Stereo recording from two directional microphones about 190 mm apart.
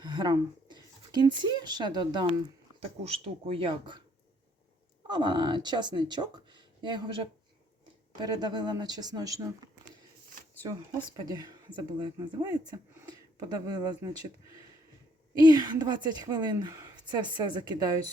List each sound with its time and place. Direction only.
0.0 s a woman's voice: 20° right (ahead or behind)
5.0 s a woman's voice: 25° right (ahead or behind)
11.2 s a woman's voice: 20° right (ahead or behind)
12.7 s a sound: 15° right (ahead or behind)
13.7 s a woman's voice: 20° right (ahead or behind)
15.4 s a woman's voice: 20° right (ahead or behind)